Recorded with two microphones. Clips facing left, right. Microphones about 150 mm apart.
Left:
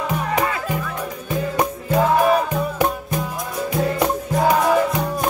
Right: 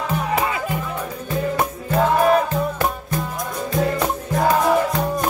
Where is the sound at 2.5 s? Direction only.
15° left (ahead or behind).